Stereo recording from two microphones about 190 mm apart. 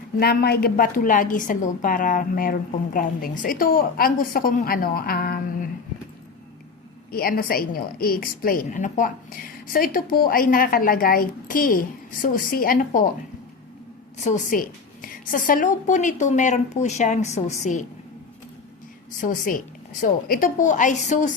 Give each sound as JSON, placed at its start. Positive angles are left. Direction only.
{"t": 0.2, "sound": "a woman's voice", "side_deg": 55}
{"t": 7.1, "sound": "a woman's voice", "side_deg": 50}
{"t": 14.3, "sound": "a woman's voice", "side_deg": 45}
{"t": 19.2, "sound": "a woman's voice", "side_deg": 45}